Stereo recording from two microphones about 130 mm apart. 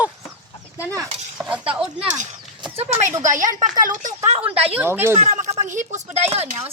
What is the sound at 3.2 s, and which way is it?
Speech, 75° right (ahead or behind).